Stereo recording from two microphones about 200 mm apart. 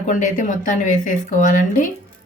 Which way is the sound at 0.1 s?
40° left (ahead or behind).